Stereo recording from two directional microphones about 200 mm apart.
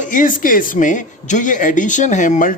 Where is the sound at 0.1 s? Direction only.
40° left (ahead or behind).